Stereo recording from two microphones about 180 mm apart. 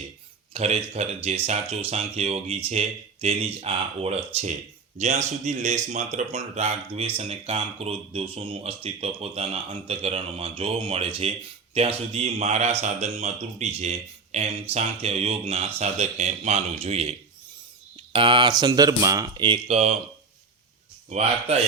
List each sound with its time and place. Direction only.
0.5 s speech: 35° right (ahead or behind)
21.1 s speech: 35° right (ahead or behind)